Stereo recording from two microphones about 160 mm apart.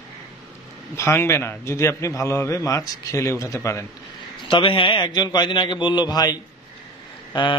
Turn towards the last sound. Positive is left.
turn(degrees=30)  # may be behind; listen again after turning